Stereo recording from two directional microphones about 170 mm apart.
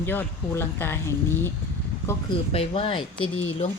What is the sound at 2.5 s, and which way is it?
Speech, 35° left (ahead or behind).